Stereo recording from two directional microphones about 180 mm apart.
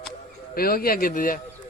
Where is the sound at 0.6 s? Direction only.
55° left (ahead or behind).